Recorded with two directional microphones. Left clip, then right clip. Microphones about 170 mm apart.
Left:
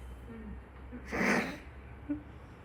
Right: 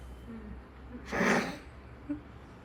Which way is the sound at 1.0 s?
20° right (ahead or behind).